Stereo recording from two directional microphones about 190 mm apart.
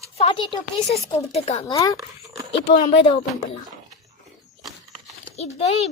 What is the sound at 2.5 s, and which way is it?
Speech, 30° left (ahead or behind).